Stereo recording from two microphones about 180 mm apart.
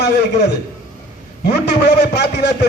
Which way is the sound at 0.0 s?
70° left (ahead or behind).